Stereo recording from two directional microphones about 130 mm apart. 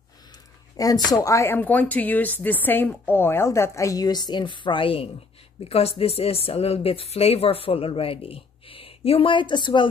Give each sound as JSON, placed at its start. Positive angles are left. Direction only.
{"t": 0.7, "sound": "speech", "side_deg": 30}